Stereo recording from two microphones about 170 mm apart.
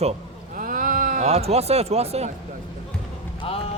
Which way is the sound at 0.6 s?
55° right (ahead or behind).